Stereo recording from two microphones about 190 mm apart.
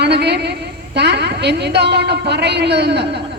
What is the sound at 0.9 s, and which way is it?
A woman's voice, 60° right (ahead or behind).